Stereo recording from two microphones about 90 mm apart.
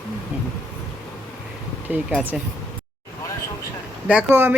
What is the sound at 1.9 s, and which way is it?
Speech, 20° right (ahead or behind).